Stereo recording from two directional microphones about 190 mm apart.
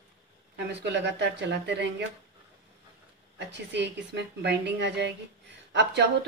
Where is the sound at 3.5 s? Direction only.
65° right (ahead or behind).